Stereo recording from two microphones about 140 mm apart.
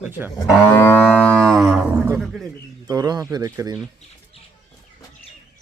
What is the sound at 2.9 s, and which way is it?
Speech, 30° right (ahead or behind).